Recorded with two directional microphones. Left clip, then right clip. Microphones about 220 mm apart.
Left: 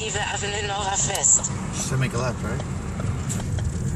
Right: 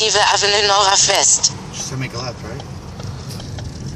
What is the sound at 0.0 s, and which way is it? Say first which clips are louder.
Speech: right 13 dB; 25° right (ahead or behind).